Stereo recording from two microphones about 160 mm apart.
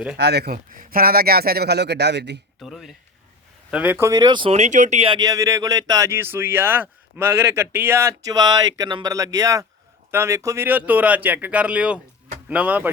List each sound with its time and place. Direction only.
0.2 s speech: 90° right
2.6 s speech: centre (ahead or behind); by 4.5 s 30° right (ahead or behind)
4.5 s speech: 50° right (ahead or behind); by 12.9 s 10° right (ahead or behind)